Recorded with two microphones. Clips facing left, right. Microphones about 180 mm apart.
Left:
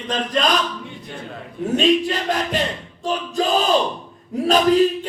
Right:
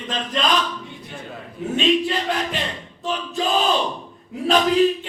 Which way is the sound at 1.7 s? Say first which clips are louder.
Left 2 dB; 40° left (ahead or behind).